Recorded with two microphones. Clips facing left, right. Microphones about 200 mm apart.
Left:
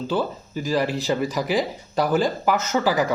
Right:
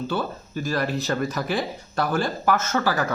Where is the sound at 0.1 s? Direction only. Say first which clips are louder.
Left 3 dB; 15° left (ahead or behind).